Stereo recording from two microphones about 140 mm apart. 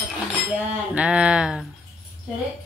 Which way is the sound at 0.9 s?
10° right (ahead or behind).